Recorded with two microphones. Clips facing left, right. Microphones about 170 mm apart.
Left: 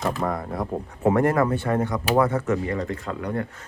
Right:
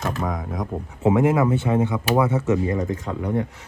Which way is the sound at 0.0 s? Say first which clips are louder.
Left 1 dB; centre (ahead or behind).